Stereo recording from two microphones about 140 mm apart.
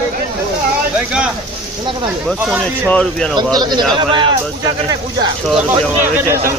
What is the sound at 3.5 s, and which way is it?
Speech, 30° right (ahead or behind).